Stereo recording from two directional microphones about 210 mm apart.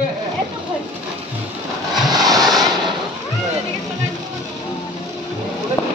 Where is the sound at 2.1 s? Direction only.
20° right (ahead or behind).